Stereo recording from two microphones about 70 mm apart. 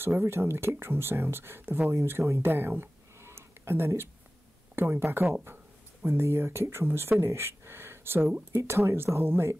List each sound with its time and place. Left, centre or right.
0.0 s speech: right